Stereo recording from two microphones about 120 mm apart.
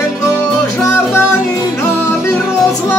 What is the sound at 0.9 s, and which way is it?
Music, 20° left (ahead or behind).